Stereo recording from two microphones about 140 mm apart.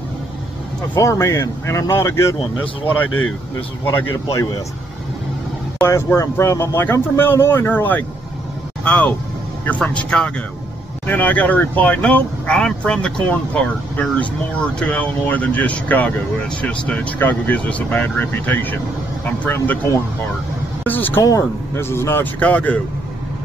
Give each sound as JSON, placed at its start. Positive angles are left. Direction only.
{"t": 0.9, "sound": "speech", "side_deg": 20}
{"t": 3.9, "sound": "speech", "side_deg": 25}
{"t": 5.8, "sound": "speech", "side_deg": 20}